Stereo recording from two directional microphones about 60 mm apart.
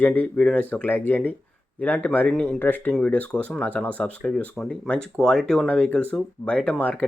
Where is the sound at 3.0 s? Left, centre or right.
Left.